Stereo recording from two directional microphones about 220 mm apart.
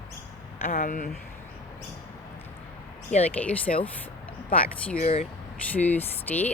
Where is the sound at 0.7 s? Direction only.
40° left (ahead or behind).